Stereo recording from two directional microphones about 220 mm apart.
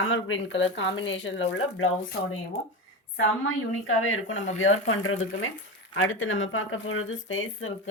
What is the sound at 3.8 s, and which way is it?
Speech, 65° left (ahead or behind).